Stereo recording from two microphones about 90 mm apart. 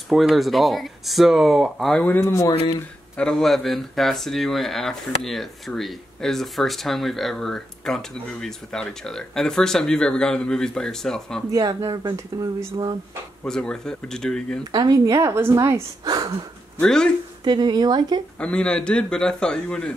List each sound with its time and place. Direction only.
0.1 s speech: centre (ahead or behind)
2.0 s speech: 20° left (ahead or behind)
3.2 s speech: 5° left (ahead or behind)
11.5 s a woman's voice: 40° right (ahead or behind)
13.5 s a man's voice: 5° left (ahead or behind)
14.7 s a woman's voice: 45° right (ahead or behind)
16.8 s a man's voice: 10° left (ahead or behind)
17.5 s speech: 55° right (ahead or behind)
18.4 s a man's voice: 10° left (ahead or behind)